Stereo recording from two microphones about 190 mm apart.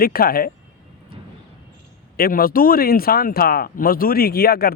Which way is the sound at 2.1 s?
50° left (ahead or behind).